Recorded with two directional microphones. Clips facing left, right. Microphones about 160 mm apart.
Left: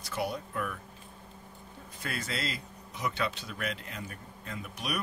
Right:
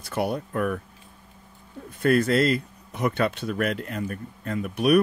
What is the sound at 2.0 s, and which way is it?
Speech, 55° right (ahead or behind).